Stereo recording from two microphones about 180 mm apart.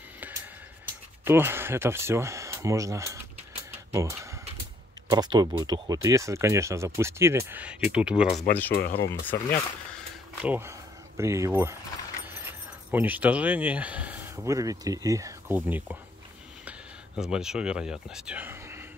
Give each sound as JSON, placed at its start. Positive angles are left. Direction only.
{"t": 1.2, "sound": "speech", "side_deg": -10}
{"t": 8.7, "sound": "speech", "side_deg": 60}
{"t": 9.0, "sound": "speech", "side_deg": 10}
{"t": 10.4, "sound": "speech", "side_deg": -10}
{"t": 12.9, "sound": "speech", "side_deg": -10}
{"t": 17.2, "sound": "speech", "side_deg": -5}